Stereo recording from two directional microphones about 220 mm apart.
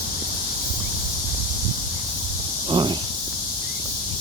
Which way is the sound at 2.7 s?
20° right (ahead or behind).